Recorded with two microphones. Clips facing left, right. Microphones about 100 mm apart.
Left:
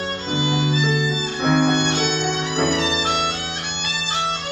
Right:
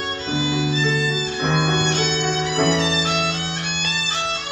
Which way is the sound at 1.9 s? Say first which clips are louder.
Even; 10° left (ahead or behind).